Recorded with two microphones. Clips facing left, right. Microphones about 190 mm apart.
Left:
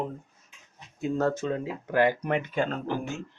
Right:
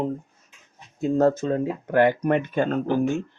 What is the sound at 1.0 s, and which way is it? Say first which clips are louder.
Speech: right 6 dB; 40° right (ahead or behind).